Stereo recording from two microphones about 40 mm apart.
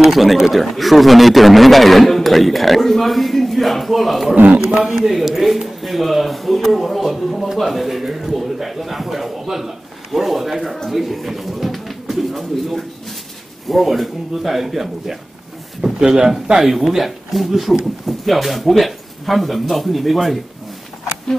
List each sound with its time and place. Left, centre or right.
0.0 s speech: centre
4.6 s a man's voice: right
4.9 s speech: centre